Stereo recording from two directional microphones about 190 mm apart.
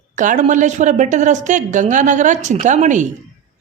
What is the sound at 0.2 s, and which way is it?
A woman's voice, 40° right (ahead or behind).